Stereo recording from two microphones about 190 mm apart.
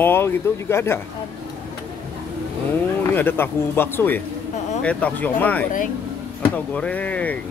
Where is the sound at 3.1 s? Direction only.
10° left (ahead or behind).